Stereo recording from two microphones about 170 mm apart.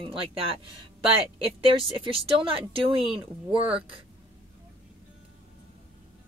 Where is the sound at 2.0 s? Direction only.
30° right (ahead or behind).